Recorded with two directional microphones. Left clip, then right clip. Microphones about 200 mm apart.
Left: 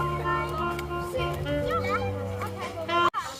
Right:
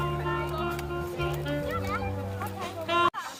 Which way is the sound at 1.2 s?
45° right (ahead or behind).